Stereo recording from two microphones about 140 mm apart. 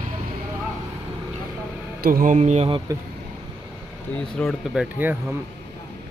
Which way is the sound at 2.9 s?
25° right (ahead or behind).